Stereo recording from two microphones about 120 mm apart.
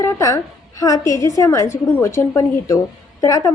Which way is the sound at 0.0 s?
25° left (ahead or behind).